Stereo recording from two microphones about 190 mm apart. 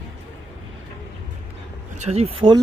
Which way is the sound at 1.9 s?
35° right (ahead or behind).